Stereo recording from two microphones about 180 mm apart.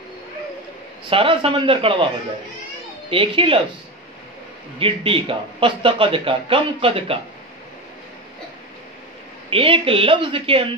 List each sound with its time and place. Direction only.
1.1 s a man's voice: 30° right (ahead or behind)
3.1 s speech: 30° right (ahead or behind)
4.7 s a man's voice: 30° right (ahead or behind)
9.5 s a man's voice: 30° right (ahead or behind)